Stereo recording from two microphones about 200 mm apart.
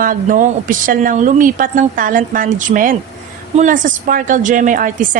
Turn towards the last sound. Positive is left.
turn(degrees=-40)  # may be behind; listen again after turning